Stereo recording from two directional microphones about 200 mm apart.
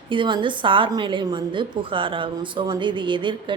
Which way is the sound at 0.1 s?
25° right (ahead or behind).